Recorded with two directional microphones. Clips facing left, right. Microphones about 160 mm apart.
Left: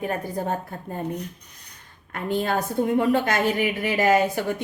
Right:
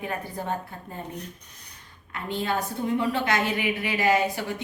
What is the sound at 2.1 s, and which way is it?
A woman's voice, 50° left (ahead or behind).